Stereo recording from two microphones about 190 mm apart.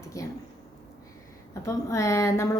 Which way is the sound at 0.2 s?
15° left (ahead or behind).